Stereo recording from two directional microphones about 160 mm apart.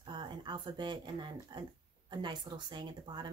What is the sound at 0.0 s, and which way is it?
Speech, 30° right (ahead or behind).